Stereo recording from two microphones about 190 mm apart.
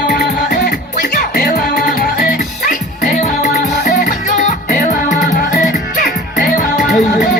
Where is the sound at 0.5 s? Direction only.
55° left (ahead or behind).